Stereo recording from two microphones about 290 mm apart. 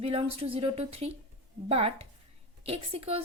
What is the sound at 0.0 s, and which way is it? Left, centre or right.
Speech, centre.